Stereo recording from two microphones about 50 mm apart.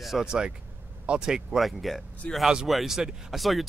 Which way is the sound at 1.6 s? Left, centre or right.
Centre.